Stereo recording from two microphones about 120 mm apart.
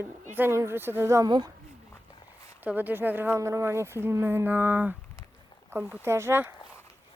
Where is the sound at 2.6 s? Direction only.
15° right (ahead or behind).